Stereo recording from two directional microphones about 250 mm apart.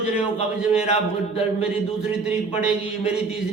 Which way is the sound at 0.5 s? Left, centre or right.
Centre.